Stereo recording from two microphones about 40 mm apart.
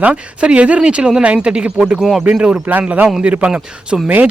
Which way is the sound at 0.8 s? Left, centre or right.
Right.